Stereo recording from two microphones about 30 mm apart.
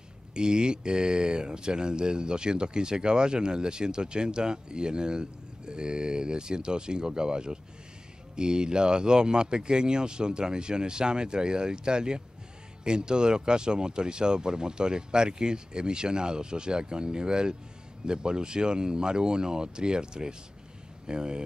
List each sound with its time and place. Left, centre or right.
0.3 s speech: right